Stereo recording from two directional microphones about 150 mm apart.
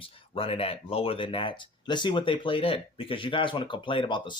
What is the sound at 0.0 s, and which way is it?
Speech, 40° left (ahead or behind).